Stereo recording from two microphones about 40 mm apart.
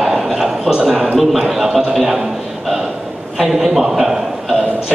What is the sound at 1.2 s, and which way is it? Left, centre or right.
A man's voice, centre.